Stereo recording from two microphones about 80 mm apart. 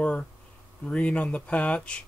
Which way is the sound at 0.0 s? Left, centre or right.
Centre.